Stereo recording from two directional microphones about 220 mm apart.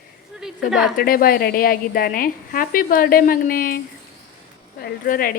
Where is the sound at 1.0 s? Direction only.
40° left (ahead or behind).